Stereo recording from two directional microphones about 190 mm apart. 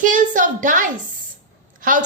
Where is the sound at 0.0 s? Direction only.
45° right (ahead or behind).